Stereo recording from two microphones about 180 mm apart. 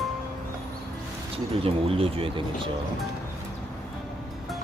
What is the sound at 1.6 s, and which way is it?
Speech, 30° right (ahead or behind).